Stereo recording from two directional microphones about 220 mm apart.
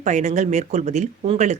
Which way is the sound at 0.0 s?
30° right (ahead or behind).